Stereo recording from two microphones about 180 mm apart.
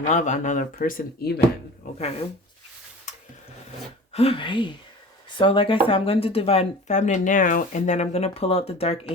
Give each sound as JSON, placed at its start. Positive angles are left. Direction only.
{"t": 0.0, "sound": "speech", "side_deg": 40}
{"t": 3.1, "sound": "a sound", "side_deg": 40}
{"t": 4.1, "sound": "speech", "side_deg": 35}